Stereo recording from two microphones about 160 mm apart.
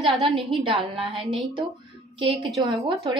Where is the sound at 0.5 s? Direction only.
35° right (ahead or behind).